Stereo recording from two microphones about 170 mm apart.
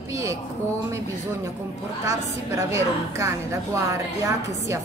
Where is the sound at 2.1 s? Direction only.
15° right (ahead or behind).